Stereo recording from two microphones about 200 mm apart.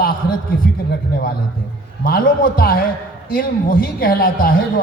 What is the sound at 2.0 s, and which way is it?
A man's voice, 50° left (ahead or behind).